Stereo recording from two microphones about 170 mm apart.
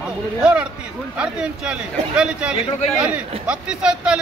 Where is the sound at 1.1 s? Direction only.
5° right (ahead or behind).